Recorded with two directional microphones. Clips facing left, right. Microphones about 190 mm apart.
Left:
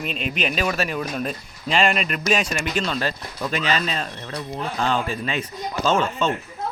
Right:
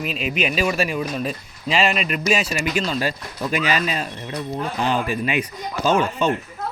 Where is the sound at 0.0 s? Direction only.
5° right (ahead or behind).